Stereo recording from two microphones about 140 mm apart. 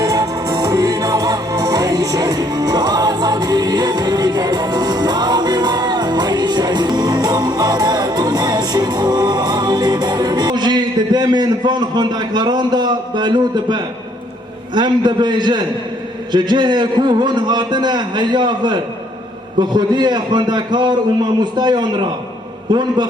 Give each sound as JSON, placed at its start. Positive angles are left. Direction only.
{"t": 0.0, "sound": "music", "side_deg": -25}
{"t": 14.8, "sound": "a man's voice", "side_deg": -30}